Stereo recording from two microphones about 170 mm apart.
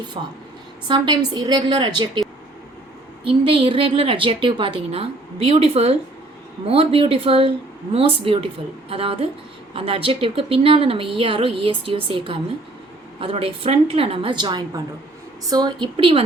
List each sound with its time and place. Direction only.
0.2 s a woman's voice: 30° right (ahead or behind)
3.2 s a woman's voice: 30° right (ahead or behind)